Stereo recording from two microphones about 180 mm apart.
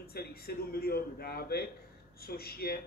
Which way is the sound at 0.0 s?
60° left (ahead or behind).